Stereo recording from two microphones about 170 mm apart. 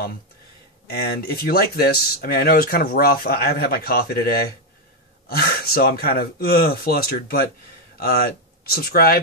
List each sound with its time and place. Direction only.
1.0 s speech: 65° left (ahead or behind)